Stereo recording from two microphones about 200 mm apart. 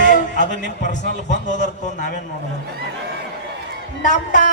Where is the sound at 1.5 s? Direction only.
35° left (ahead or behind).